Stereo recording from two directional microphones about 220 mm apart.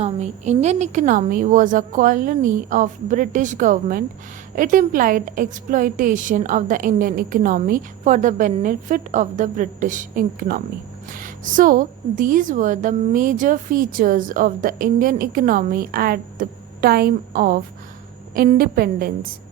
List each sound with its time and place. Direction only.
0.0 s a woman's voice: 30° right (ahead or behind)